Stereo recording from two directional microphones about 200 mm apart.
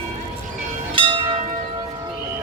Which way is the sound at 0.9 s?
25° right (ahead or behind).